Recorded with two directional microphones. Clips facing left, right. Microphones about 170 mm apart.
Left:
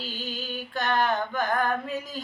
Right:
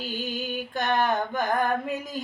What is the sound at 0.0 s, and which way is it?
Music, 15° right (ahead or behind).